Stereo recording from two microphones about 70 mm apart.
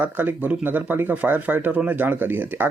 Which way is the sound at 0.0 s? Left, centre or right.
Right.